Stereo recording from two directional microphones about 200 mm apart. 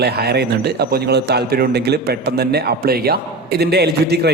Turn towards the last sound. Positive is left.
turn(degrees=-55)  # may be behind; listen again after turning